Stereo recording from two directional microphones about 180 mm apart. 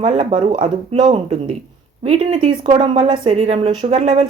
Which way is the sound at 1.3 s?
35° right (ahead or behind).